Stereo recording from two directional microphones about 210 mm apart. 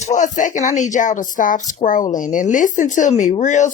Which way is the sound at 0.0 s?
35° left (ahead or behind).